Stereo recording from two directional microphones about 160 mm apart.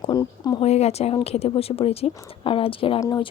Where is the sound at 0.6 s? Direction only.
40° left (ahead or behind).